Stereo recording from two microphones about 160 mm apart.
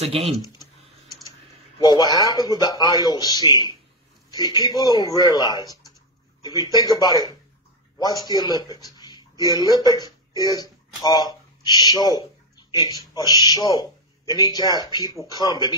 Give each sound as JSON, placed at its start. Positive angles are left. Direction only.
{"t": 0.1, "sound": "speech", "side_deg": -35}
{"t": 1.8, "sound": "a man's voice", "side_deg": 25}